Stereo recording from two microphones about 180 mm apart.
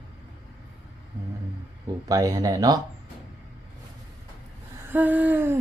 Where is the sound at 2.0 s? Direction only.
20° right (ahead or behind).